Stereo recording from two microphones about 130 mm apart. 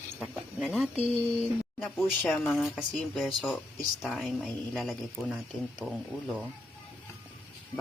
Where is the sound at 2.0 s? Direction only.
5° left (ahead or behind).